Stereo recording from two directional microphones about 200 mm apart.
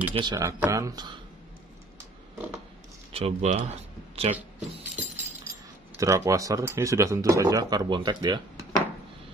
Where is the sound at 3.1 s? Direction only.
30° right (ahead or behind).